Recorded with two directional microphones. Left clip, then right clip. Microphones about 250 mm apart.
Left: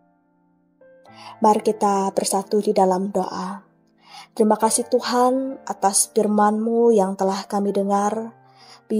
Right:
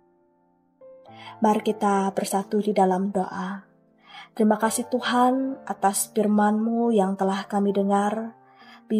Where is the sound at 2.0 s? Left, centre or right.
Left.